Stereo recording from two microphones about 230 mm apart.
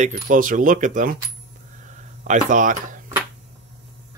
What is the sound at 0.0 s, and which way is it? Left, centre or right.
Speech, right.